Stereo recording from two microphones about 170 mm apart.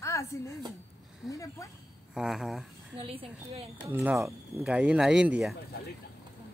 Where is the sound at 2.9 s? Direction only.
30° right (ahead or behind).